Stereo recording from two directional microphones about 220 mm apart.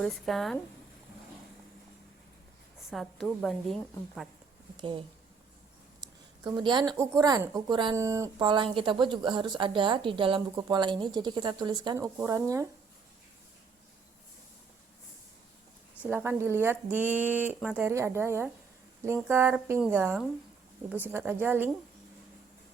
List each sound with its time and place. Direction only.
0.0 s a woman's voice: centre (ahead or behind)
2.9 s a woman's voice: centre (ahead or behind)
4.8 s a woman's voice: 20° right (ahead or behind)
6.4 s a woman's voice: 20° right (ahead or behind)
16.0 s speech: 10° right (ahead or behind)